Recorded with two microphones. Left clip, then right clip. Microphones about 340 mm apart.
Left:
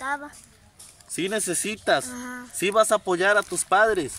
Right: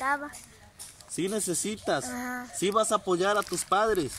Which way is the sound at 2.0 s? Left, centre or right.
Centre.